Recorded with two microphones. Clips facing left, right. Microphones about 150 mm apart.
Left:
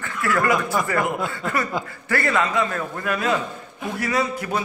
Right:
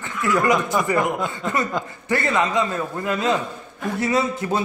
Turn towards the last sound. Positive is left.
turn(degrees=-25)  # may be behind; listen again after turning